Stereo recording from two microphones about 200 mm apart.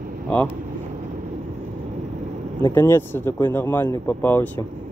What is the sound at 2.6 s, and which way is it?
Speech, 15° left (ahead or behind).